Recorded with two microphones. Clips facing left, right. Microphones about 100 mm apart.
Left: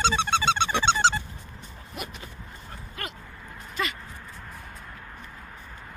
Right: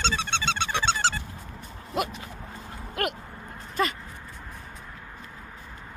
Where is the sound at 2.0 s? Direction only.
90° right.